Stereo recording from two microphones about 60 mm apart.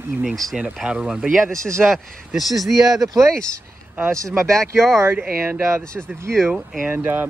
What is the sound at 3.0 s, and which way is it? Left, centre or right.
Speech, right.